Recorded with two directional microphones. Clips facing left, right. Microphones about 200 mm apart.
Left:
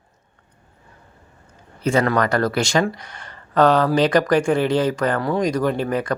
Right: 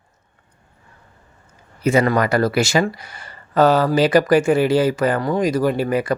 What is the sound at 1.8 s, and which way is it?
Speech, 5° right (ahead or behind).